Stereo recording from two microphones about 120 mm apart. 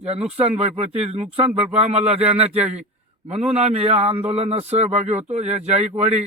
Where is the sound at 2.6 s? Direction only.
10° right (ahead or behind).